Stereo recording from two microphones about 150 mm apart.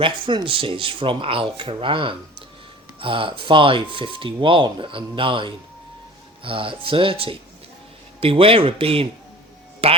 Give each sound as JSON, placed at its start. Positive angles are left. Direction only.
{"t": 0.0, "sound": "speech", "side_deg": -35}